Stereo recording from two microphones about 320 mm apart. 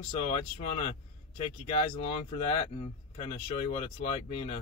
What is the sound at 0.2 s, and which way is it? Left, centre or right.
Speech, centre.